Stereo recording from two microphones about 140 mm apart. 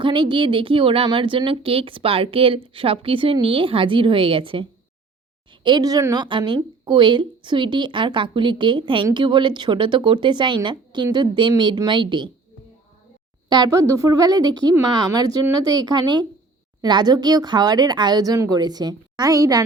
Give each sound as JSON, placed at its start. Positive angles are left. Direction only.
{"t": 0.0, "sound": "speech", "side_deg": -35}
{"t": 5.6, "sound": "speech", "side_deg": -30}
{"t": 13.5, "sound": "speech", "side_deg": -25}